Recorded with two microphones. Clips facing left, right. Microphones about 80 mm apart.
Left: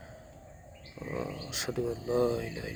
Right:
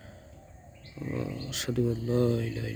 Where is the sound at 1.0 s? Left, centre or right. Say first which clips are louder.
Right 2 dB; centre.